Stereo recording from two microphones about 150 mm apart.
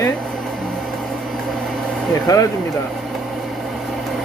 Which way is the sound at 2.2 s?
25° left (ahead or behind).